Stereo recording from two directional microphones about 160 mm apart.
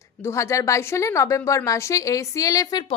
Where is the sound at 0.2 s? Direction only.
15° left (ahead or behind).